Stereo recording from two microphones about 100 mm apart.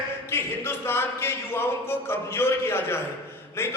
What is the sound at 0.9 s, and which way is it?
A man's voice, 25° left (ahead or behind).